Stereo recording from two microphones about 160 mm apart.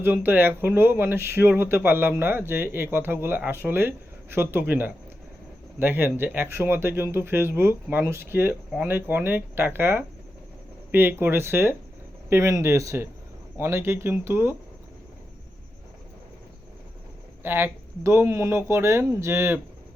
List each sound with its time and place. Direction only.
0.0 s speech: 10° right (ahead or behind)
17.4 s speech: 15° right (ahead or behind)